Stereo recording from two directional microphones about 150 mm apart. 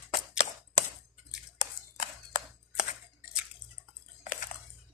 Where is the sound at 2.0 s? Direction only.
55° left (ahead or behind).